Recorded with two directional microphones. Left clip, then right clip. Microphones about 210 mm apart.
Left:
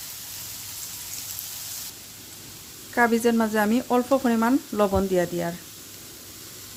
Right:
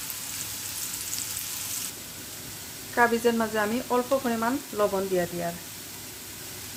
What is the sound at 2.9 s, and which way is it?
Speech, 25° left (ahead or behind).